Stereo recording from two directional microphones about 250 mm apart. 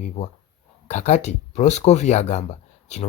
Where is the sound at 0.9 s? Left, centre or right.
Left.